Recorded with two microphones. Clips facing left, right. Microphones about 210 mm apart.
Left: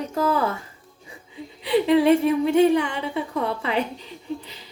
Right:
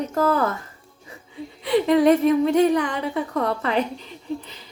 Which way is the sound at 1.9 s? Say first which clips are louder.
Right 1 dB; 10° left (ahead or behind).